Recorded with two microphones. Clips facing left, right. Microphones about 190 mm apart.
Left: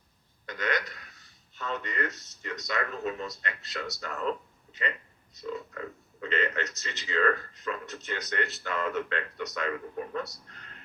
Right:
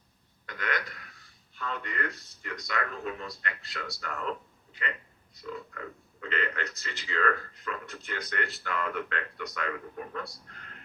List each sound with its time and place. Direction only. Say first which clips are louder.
0.4 s speech: left 3 dB; 20° left (ahead or behind)